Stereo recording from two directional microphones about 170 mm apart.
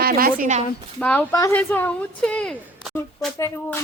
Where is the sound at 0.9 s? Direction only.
10° left (ahead or behind).